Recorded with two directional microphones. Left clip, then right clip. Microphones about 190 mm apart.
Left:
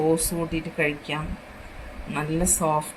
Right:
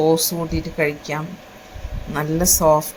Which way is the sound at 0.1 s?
20° right (ahead or behind).